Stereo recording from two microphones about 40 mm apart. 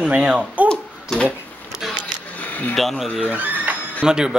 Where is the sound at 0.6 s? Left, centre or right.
Right.